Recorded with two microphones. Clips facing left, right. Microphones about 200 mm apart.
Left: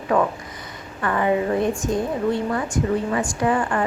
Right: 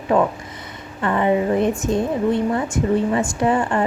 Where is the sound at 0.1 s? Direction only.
25° right (ahead or behind).